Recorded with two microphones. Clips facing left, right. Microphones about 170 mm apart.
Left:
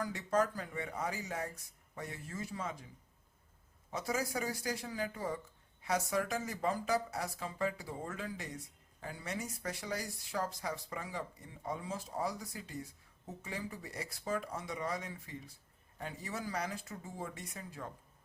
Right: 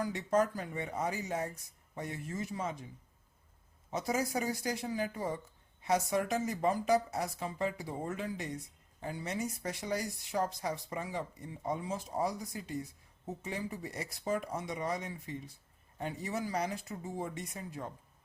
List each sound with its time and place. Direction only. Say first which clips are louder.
0.0 s speech: right 3 dB; 20° right (ahead or behind)
3.9 s speech: right 3 dB; 20° right (ahead or behind)